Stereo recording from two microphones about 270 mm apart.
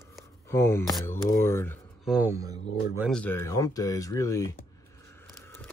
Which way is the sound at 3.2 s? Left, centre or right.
Centre.